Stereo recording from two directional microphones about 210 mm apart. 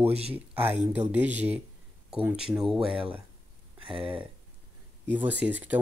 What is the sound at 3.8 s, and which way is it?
Speech, 25° right (ahead or behind).